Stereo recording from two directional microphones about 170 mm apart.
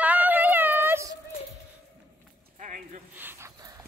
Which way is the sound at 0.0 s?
10° right (ahead or behind).